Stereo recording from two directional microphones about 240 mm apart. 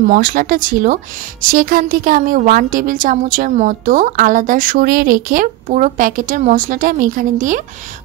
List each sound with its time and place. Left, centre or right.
0.0 s a woman's voice: right